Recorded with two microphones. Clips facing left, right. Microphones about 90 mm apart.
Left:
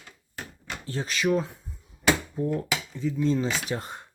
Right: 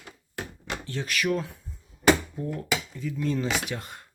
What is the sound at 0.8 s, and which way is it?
Speech, 30° left (ahead or behind).